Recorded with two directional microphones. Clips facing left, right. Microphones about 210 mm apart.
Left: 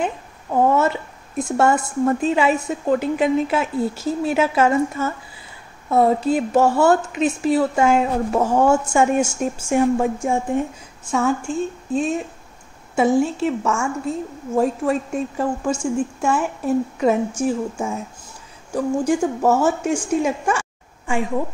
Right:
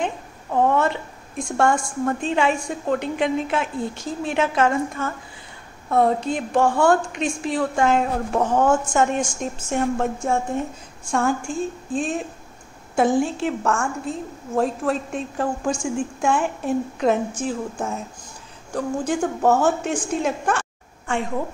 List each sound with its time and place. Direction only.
0.0 s a sound: 5° left (ahead or behind)
1.4 s a woman's voice: 5° left (ahead or behind)
11.1 s a woman's voice: 5° left (ahead or behind)
11.4 s speech: 40° left (ahead or behind)
12.9 s a woman's voice: centre (ahead or behind)